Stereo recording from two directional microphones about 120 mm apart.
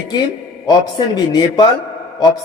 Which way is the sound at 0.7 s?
35° left (ahead or behind).